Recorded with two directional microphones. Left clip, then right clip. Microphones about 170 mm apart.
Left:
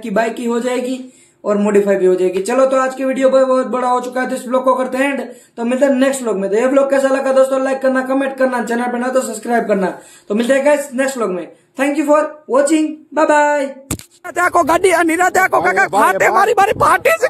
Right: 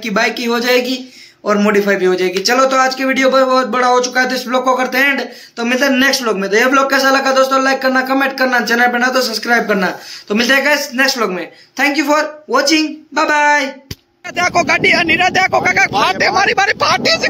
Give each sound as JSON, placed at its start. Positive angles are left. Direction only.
{"t": 0.0, "sound": "speech", "side_deg": 5}
{"t": 15.5, "sound": "speech", "side_deg": 5}
{"t": 16.0, "sound": "speech", "side_deg": 20}
{"t": 16.5, "sound": "speech", "side_deg": 30}